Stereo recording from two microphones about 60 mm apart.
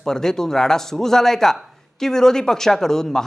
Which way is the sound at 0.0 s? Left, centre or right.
Centre.